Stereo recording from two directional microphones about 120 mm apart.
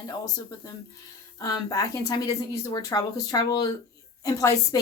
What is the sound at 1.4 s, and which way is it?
A woman's voice, 30° left (ahead or behind).